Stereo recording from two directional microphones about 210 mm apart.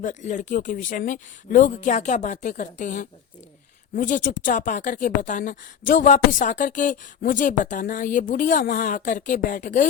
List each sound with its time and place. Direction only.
0.0 s a woman's voice: 35° left (ahead or behind)